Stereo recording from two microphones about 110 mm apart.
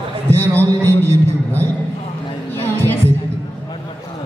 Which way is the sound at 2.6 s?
20° left (ahead or behind).